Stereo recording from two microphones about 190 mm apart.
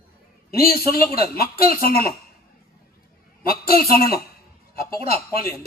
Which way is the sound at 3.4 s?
50° left (ahead or behind).